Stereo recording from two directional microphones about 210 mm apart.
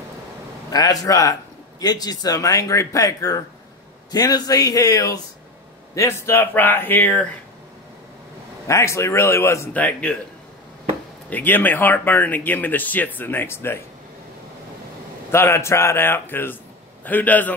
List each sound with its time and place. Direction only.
0.7 s speech: 15° left (ahead or behind)
8.6 s speech: 15° left (ahead or behind)
11.2 s speech: 10° left (ahead or behind)
15.3 s speech: 10° left (ahead or behind)